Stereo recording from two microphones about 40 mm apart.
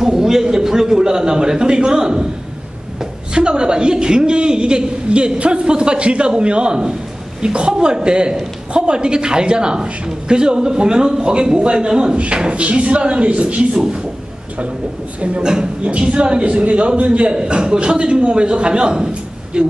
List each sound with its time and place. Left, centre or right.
0.0 s a sound: centre
3.3 s a man's voice: right
15.1 s a man's voice: right
15.4 s a man's voice: centre
15.8 s a man's voice: right